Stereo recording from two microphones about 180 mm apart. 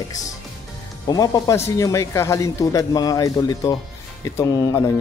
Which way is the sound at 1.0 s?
20° left (ahead or behind).